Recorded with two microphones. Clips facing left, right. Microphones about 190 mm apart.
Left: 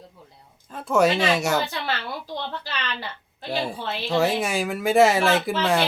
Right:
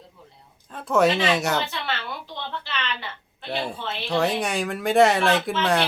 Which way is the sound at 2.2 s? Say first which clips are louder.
Left 3 dB; 40° left (ahead or behind).